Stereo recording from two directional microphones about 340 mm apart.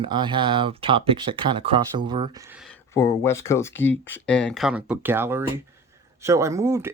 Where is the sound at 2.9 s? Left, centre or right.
Centre.